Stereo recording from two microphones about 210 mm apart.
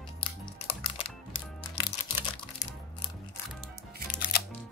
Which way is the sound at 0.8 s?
25° left (ahead or behind).